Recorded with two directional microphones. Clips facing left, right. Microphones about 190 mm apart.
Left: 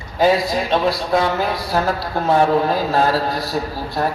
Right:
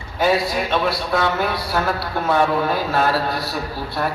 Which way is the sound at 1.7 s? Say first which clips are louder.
Left 3 dB; 35° left (ahead or behind).